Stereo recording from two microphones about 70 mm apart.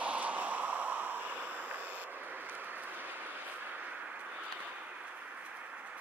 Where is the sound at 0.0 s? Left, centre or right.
Centre.